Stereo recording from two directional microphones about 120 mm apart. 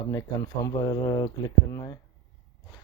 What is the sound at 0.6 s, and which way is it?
Speech, 30° left (ahead or behind).